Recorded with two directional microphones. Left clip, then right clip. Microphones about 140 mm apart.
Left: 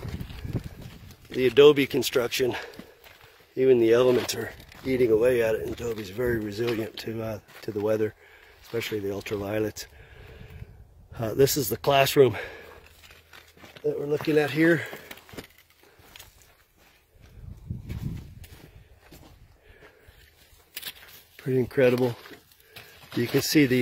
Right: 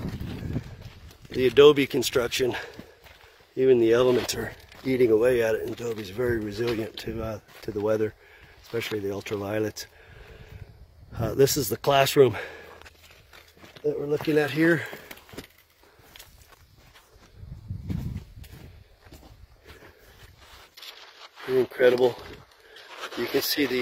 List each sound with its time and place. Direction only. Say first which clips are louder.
1.3 s speech: even; centre (ahead or behind)
3.5 s speech: even; 10° left (ahead or behind)
4.1 s speech: even; centre (ahead or behind)
8.6 s speech: even; centre (ahead or behind)
9.4 s a sound: even; centre (ahead or behind)
11.1 s speech: right 1 dB; centre (ahead or behind)
13.8 s speech: even; 5° left (ahead or behind)
14.3 s speech: left 1 dB; 35° left (ahead or behind)
21.5 s speech: right 2 dB; 35° right (ahead or behind)
23.3 s speech: left 3 dB; centre (ahead or behind)